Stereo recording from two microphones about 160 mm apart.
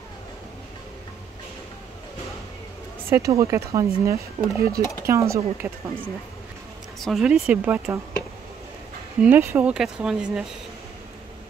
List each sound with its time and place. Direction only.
3.1 s speech: 20° right (ahead or behind)
7.0 s speech: centre (ahead or behind)
9.2 s speech: 15° right (ahead or behind)